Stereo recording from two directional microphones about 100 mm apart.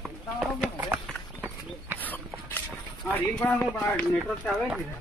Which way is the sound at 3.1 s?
20° left (ahead or behind).